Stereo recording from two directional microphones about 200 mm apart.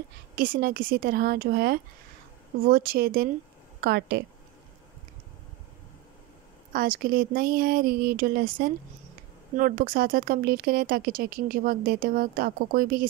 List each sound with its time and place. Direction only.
0.4 s speech: 45° right (ahead or behind)
6.7 s speech: 45° right (ahead or behind)